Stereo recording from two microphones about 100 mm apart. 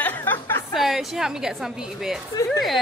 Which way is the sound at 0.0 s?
20° left (ahead or behind).